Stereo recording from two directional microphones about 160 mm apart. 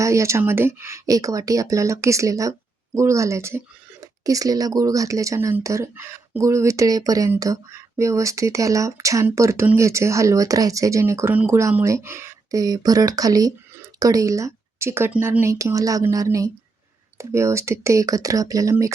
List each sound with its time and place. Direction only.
0.0 s speech: 20° right (ahead or behind)